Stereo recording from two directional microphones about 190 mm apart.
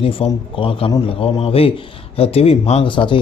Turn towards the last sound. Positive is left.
turn(degrees=25)  # may be behind; listen again after turning